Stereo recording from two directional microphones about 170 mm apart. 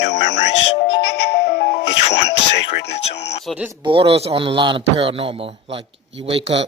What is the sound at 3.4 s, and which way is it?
Speech, 5° right (ahead or behind).